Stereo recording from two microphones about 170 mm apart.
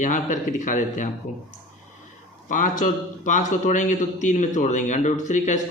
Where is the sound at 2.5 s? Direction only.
50° left (ahead or behind).